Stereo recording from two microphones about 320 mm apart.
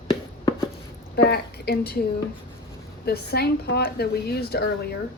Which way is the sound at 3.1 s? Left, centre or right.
Left.